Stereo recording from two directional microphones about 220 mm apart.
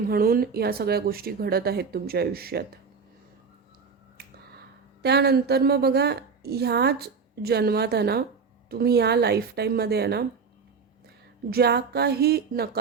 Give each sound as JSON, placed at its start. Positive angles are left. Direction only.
{"t": 0.1, "sound": "a woman's voice", "side_deg": -40}
{"t": 5.0, "sound": "a woman's voice", "side_deg": -45}
{"t": 11.5, "sound": "a woman's voice", "side_deg": -45}